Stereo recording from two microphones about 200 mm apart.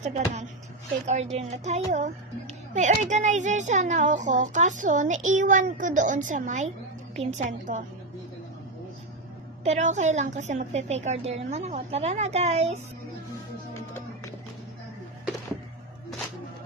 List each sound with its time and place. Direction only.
0.0 s a child's voice: 35° right (ahead or behind)
9.6 s a child's voice: 35° right (ahead or behind)